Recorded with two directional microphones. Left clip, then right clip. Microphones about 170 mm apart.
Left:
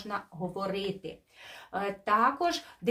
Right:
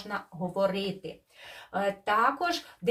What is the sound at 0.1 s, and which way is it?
Speech, 20° left (ahead or behind).